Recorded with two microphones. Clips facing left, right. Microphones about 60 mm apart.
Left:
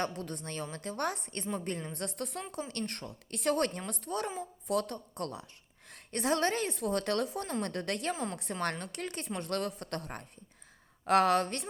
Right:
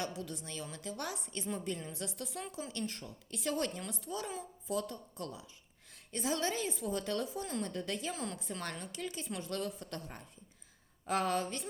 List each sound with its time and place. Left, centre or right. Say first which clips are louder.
0.0 s a woman's voice: left 4 dB; left
8.1 s a woman's voice: left 4 dB; left
8.8 s speech: left 3 dB; left